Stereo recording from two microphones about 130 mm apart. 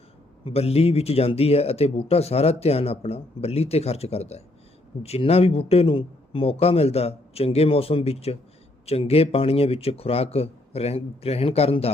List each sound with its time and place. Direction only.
0.4 s speech: 50° left (ahead or behind)